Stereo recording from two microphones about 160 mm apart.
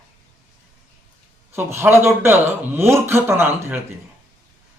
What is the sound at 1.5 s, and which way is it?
A man's voice, 15° right (ahead or behind).